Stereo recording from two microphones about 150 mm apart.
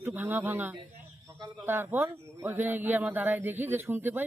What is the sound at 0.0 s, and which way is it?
Speech, 15° right (ahead or behind).